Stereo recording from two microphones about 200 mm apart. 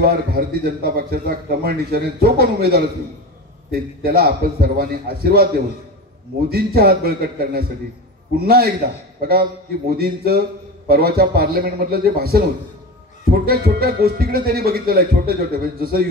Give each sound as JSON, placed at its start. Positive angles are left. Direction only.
{"t": 0.0, "sound": "a man's voice", "side_deg": -50}
{"t": 6.5, "sound": "a man's voice", "side_deg": -50}